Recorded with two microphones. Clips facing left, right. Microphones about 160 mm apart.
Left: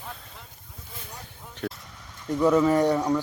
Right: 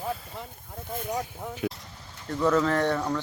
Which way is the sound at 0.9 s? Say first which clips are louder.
Right 13 dB; 50° right (ahead or behind).